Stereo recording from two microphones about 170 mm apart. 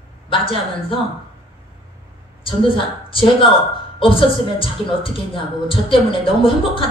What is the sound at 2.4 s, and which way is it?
A woman's voice, 30° left (ahead or behind).